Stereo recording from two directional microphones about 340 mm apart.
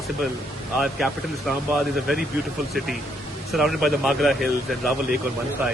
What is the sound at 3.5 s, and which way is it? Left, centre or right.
Speech, centre.